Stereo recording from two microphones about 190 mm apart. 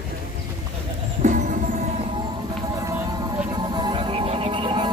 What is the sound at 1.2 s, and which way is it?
Music, 40° right (ahead or behind).